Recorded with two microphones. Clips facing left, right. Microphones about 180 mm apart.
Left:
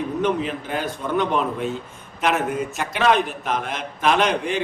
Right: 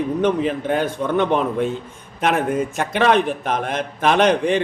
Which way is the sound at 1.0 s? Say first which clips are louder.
Right 1 dB; 55° right (ahead or behind).